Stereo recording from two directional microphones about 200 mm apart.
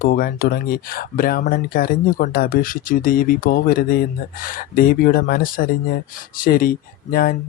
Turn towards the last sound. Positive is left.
turn(degrees=45)  # may be behind; listen again after turning